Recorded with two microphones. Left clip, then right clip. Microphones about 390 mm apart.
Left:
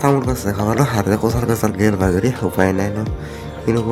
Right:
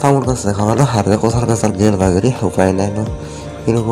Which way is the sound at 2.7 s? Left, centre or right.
Left.